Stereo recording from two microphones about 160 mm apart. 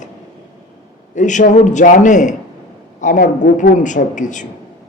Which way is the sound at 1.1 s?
50° left (ahead or behind).